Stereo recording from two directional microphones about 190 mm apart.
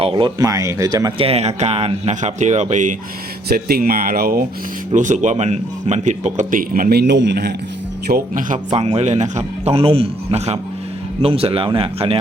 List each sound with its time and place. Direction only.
0.0 s speech: 25° right (ahead or behind)
1.3 s a man's voice: 35° right (ahead or behind)
3.5 s speech: 50° right (ahead or behind)
4.9 s a man's voice: 40° right (ahead or behind); by 7.5 s 60° right (ahead or behind)
8.0 s speech: 50° right (ahead or behind)
8.7 s a man's voice: 30° right (ahead or behind)